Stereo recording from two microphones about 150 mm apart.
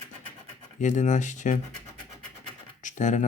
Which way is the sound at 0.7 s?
55° left (ahead or behind).